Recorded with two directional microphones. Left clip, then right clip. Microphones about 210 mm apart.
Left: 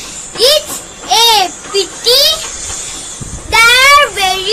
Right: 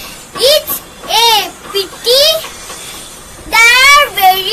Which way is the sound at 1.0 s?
15° left (ahead or behind).